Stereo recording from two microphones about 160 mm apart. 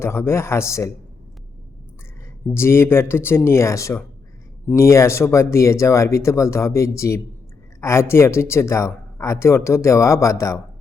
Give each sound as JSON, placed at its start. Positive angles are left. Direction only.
{"t": 0.0, "sound": "speech", "side_deg": 15}
{"t": 2.5, "sound": "speech", "side_deg": 15}